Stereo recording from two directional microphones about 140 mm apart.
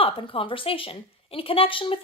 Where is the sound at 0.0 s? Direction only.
40° left (ahead or behind).